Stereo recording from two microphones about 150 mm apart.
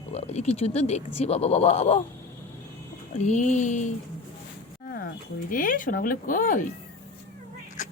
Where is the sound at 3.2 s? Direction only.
50° left (ahead or behind).